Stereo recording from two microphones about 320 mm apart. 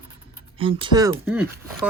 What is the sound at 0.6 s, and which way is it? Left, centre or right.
Speech, centre.